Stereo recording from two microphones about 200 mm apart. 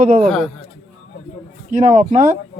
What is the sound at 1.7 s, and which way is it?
Speech, 35° right (ahead or behind).